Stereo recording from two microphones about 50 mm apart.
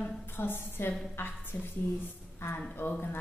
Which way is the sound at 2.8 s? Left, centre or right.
Left.